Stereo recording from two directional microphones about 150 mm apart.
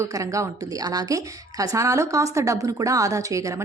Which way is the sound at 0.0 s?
20° right (ahead or behind).